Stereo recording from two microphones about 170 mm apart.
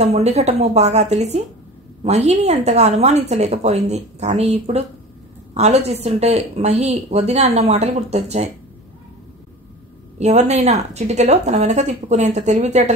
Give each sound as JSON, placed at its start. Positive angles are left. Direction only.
{"t": 0.0, "sound": "a woman's voice", "side_deg": -40}
{"t": 10.1, "sound": "a woman's voice", "side_deg": -40}